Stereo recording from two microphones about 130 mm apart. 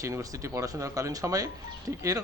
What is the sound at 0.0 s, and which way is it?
Speech, 25° right (ahead or behind).